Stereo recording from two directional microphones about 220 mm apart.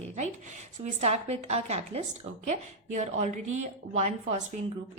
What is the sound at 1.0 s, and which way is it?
A woman's voice, 30° right (ahead or behind).